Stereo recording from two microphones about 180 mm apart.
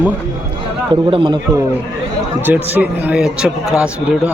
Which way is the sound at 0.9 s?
30° right (ahead or behind).